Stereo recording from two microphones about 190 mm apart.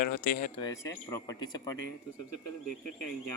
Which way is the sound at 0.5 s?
20° left (ahead or behind).